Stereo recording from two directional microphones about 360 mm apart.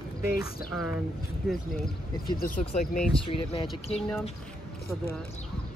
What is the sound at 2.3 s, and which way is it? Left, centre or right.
Speech, left.